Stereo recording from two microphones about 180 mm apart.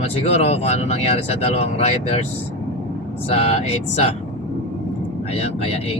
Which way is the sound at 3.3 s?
35° left (ahead or behind).